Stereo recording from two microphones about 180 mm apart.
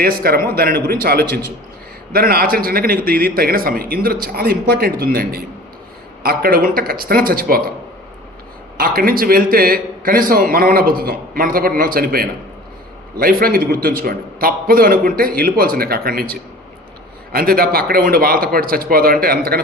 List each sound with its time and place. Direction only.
0.0 s a man's voice: 55° right (ahead or behind)
8.8 s a man's voice: 55° right (ahead or behind)
17.3 s a man's voice: 55° right (ahead or behind)